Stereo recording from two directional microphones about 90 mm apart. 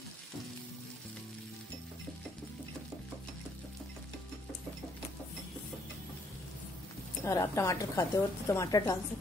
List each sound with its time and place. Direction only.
7.2 s a woman's voice: 35° left (ahead or behind)